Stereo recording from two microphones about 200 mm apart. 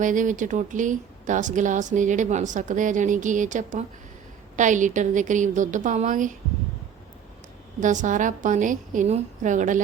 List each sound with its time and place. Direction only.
0.0 s speech: 40° right (ahead or behind)
7.8 s speech: 40° right (ahead or behind)